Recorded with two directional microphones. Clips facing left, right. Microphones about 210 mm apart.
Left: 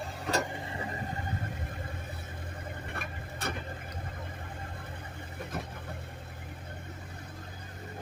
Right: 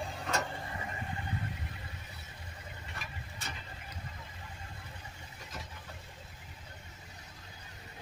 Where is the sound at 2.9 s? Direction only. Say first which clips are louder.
Left 6 dB; 55° left (ahead or behind).